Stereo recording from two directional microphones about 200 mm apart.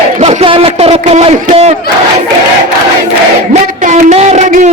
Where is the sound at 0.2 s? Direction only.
30° right (ahead or behind).